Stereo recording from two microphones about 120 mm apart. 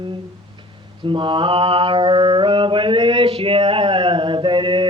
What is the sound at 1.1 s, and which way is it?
Mantra, 45° right (ahead or behind).